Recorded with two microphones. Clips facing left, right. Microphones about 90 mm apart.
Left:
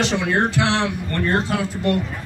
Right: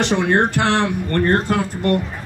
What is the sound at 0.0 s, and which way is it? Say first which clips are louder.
A man's voice: right 3 dB; 55° right (ahead or behind).